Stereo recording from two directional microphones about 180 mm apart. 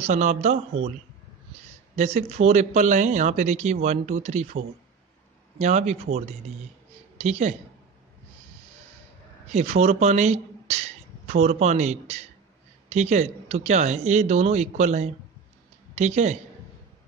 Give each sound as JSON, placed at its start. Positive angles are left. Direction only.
{"t": 0.0, "sound": "speech", "side_deg": -40}
{"t": 2.0, "sound": "speech", "side_deg": -40}
{"t": 5.6, "sound": "speech", "side_deg": -40}
{"t": 9.5, "sound": "a woman's voice", "side_deg": -40}